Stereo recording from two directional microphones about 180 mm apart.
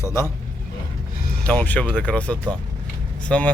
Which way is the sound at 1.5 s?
10° left (ahead or behind).